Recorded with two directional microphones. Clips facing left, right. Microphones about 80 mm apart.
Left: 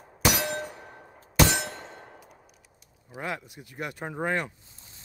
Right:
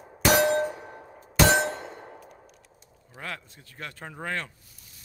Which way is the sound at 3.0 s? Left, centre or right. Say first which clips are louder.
Left 4 dB; centre.